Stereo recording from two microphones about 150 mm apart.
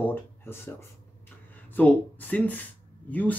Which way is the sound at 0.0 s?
15° left (ahead or behind).